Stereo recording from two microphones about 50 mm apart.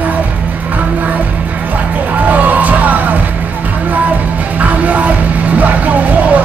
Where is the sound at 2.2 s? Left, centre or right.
Right.